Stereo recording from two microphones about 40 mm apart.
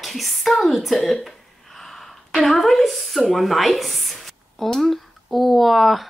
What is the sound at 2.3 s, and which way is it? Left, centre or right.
Speech, centre.